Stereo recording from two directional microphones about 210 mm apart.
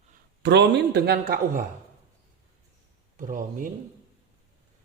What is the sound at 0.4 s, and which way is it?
A man's voice, 55° right (ahead or behind).